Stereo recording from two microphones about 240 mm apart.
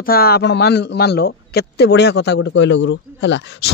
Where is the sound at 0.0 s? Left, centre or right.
Left.